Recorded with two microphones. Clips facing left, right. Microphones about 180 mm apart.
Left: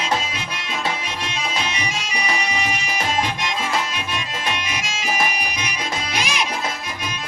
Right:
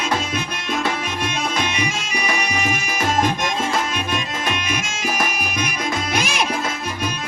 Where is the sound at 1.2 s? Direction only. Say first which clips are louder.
Right 3 dB; 50° right (ahead or behind).